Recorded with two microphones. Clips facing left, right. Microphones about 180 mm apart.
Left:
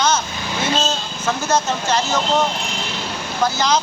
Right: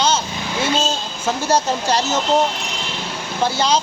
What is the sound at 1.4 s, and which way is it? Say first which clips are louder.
Speech: right 2 dB; 35° right (ahead or behind).